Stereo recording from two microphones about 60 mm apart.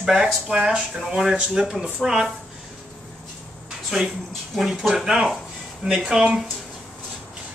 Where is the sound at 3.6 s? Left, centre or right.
Centre.